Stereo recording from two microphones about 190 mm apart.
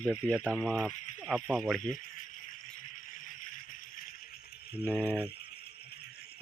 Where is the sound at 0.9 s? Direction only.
40° left (ahead or behind).